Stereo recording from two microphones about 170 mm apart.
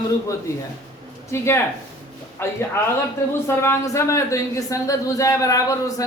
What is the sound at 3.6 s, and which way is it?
A man's voice, 15° left (ahead or behind).